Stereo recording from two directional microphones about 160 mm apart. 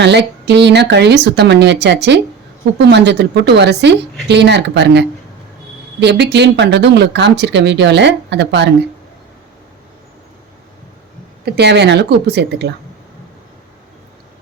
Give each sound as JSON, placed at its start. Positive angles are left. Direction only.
{"t": 0.0, "sound": "speech", "side_deg": -90}
{"t": 11.4, "sound": "speech", "side_deg": -90}